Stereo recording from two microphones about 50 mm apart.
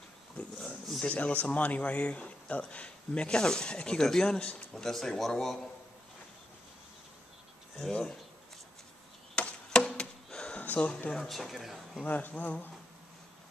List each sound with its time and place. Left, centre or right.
0.4 s a sound: centre
1.0 s a man's voice: left
4.7 s speech: centre
7.9 s speech: centre
9.3 s chop: centre
11.1 s speech: centre
12.0 s speech: left